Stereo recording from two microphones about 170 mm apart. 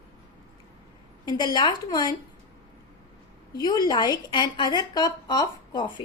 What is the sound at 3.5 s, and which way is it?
A woman's voice, 25° left (ahead or behind).